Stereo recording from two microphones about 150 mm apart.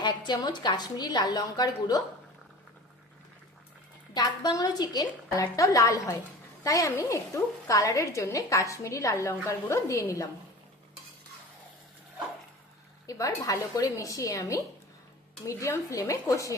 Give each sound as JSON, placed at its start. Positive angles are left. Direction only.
{"t": 0.0, "sound": "a woman's voice", "side_deg": 30}
{"t": 4.1, "sound": "a woman's voice", "side_deg": 25}
{"t": 13.1, "sound": "a woman's voice", "side_deg": 20}